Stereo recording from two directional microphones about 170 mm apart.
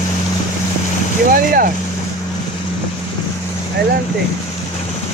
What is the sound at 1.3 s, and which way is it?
Speech, 55° right (ahead or behind).